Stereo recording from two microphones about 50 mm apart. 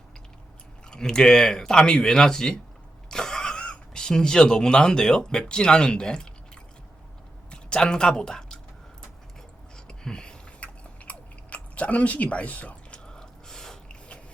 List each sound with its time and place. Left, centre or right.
0.9 s speech: centre
7.5 s speech: centre
9.7 s a sound: centre
11.0 s chewing: left
13.1 s snort: centre